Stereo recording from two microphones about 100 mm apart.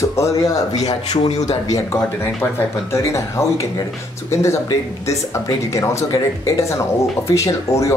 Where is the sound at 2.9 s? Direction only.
30° left (ahead or behind).